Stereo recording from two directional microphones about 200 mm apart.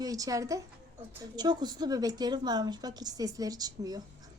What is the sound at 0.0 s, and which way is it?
A woman's voice, 15° right (ahead or behind).